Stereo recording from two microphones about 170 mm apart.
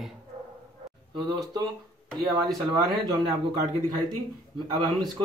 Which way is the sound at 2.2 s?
25° right (ahead or behind).